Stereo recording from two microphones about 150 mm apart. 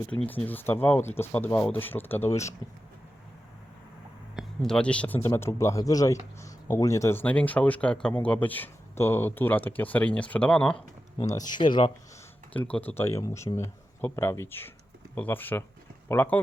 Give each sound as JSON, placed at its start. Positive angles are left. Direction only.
{"t": 0.0, "sound": "speech", "side_deg": 10}
{"t": 4.4, "sound": "speech", "side_deg": 5}
{"t": 11.3, "sound": "speech", "side_deg": 25}
{"t": 12.5, "sound": "speech", "side_deg": 10}